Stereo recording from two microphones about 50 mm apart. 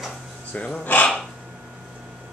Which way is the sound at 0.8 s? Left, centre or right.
Left.